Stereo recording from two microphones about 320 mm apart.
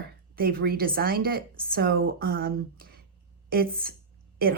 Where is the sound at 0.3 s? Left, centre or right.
Right.